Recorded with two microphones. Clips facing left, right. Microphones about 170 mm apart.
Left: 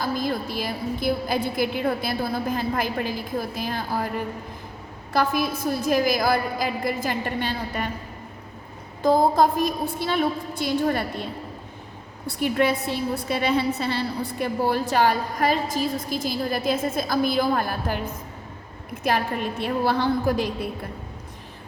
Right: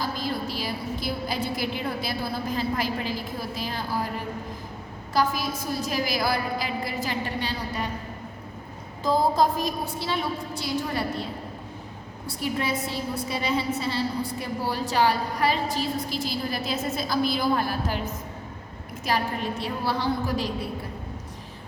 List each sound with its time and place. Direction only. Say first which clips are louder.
0.0 s a woman's voice: left 3 dB; 50° left (ahead or behind)
5.1 s a woman's voice: left 2 dB; 55° left (ahead or behind)
9.0 s a woman's voice: left 4 dB; 55° left (ahead or behind)
12.4 s a woman's voice: left 6 dB; 65° left (ahead or behind)